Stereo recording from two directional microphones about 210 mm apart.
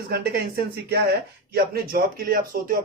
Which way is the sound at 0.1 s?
50° right (ahead or behind).